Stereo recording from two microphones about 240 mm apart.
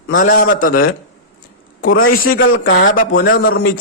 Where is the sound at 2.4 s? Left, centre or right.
Left.